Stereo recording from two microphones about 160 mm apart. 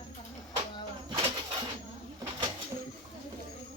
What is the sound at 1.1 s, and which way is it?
Bird, 35° right (ahead or behind).